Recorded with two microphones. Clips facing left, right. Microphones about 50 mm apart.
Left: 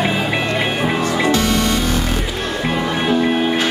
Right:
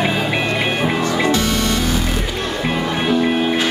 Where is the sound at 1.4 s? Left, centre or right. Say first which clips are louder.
Left 1 dB; left.